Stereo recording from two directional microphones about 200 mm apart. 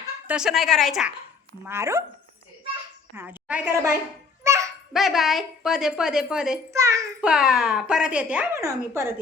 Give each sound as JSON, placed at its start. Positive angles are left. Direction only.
{"t": 0.3, "sound": "speech", "side_deg": -5}
{"t": 1.6, "sound": "a woman's voice", "side_deg": -10}
{"t": 3.2, "sound": "a woman's voice", "side_deg": -10}
{"t": 4.4, "sound": "babbling", "side_deg": -15}
{"t": 4.9, "sound": "speech", "side_deg": 0}
{"t": 6.7, "sound": "a woman's voice", "side_deg": -15}
{"t": 7.3, "sound": "speech", "side_deg": 0}